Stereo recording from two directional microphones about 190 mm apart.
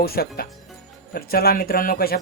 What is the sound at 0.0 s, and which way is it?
Speech, 55° left (ahead or behind).